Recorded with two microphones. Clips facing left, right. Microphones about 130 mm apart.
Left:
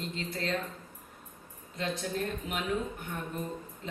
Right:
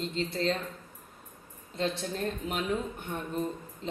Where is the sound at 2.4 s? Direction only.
30° right (ahead or behind).